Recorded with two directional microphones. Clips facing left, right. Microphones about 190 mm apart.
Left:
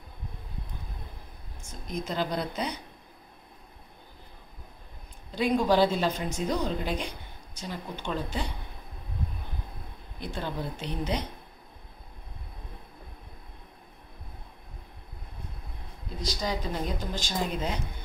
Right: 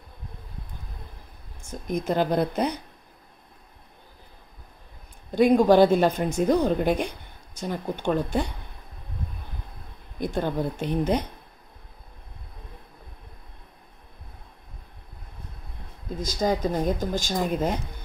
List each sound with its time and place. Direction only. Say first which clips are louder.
1.7 s a woman's voice: right 8 dB; 55° right (ahead or behind)
5.3 s a woman's voice: right 7 dB; 50° right (ahead or behind)
10.2 s speech: right 8 dB; 50° right (ahead or behind)
16.2 s speech: right 7 dB; 45° right (ahead or behind)